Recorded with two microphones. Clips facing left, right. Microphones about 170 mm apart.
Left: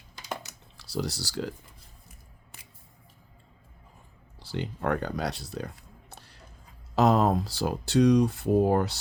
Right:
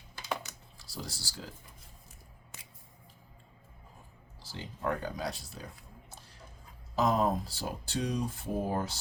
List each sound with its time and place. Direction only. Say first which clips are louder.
0.8 s speech: left 11 dB; 75° left (ahead or behind)
4.4 s speech: left 6 dB; 70° left (ahead or behind)
6.1 s a sound: left 3 dB; 70° left (ahead or behind)
6.9 s speech: left 6 dB; 75° left (ahead or behind)